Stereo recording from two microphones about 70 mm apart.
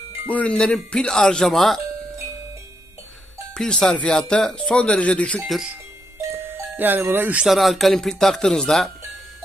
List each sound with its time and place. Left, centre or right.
0.3 s speech: centre
3.5 s speech: centre
6.3 s music: right
7.4 s speech: centre